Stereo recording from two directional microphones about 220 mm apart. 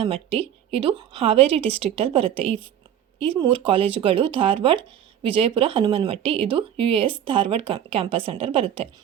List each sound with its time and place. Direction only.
0.0 s speech: 25° right (ahead or behind)